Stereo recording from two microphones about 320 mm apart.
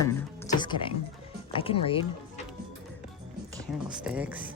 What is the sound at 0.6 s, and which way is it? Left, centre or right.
Speech, centre.